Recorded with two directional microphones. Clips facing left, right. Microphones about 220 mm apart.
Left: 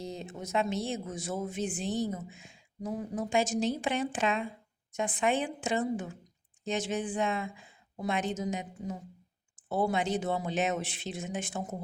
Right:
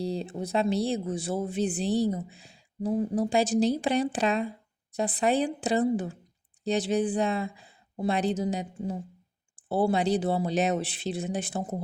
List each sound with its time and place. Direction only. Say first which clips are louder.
0.0 s speech: right 8 dB; 35° right (ahead or behind)